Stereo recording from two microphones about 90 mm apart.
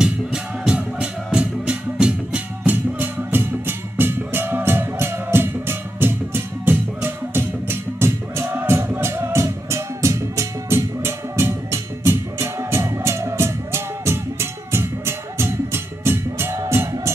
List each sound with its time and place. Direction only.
0.0 s music: 10° right (ahead or behind); by 16.9 s 35° right (ahead or behind)